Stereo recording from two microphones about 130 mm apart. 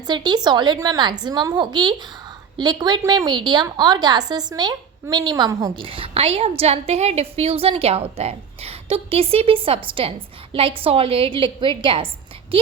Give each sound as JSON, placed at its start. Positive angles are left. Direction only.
{"t": 0.1, "sound": "a woman's voice", "side_deg": -35}
{"t": 5.7, "sound": "a woman's voice", "side_deg": -45}